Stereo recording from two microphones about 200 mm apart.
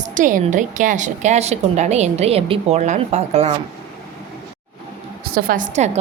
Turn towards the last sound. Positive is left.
turn(degrees=-35)  # may be behind; listen again after turning